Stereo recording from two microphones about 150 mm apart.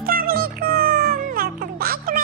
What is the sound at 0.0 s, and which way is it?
Music, 85° right.